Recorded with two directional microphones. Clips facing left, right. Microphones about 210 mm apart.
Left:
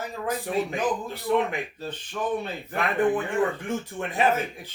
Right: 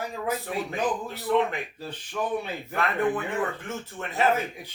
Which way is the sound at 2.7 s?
15° left (ahead or behind).